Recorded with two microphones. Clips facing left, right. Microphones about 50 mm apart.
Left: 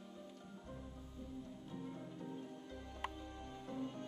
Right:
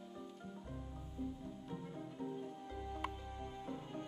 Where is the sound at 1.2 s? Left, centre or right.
Centre.